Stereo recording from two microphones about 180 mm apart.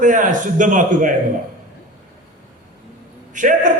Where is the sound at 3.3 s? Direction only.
45° right (ahead or behind).